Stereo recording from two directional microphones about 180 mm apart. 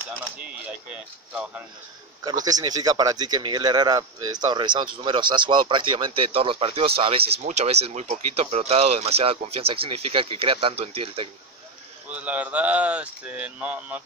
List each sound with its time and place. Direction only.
2.4 s speech: 20° right (ahead or behind)
12.1 s speech: 10° right (ahead or behind)